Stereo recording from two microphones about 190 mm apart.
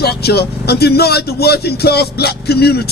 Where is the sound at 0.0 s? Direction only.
55° left (ahead or behind).